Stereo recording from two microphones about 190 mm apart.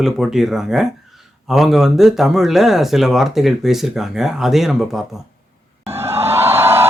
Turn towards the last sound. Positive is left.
turn(degrees=-15)  # may be behind; listen again after turning